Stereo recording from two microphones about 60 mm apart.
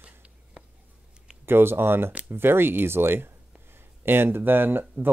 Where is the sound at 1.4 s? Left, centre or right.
Right.